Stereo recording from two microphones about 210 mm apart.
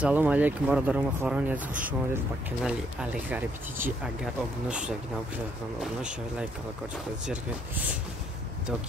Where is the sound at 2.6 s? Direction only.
5° right (ahead or behind).